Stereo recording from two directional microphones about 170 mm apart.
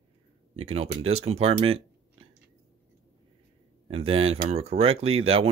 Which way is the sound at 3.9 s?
35° right (ahead or behind).